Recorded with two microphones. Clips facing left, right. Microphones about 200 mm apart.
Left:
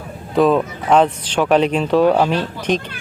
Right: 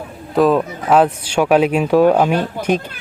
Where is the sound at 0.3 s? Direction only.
Centre (ahead or behind).